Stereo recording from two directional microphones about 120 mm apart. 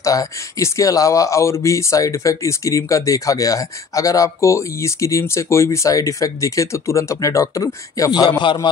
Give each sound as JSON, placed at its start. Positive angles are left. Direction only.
{"t": 0.0, "sound": "speech", "side_deg": 25}
{"t": 8.3, "sound": "a man's voice", "side_deg": 40}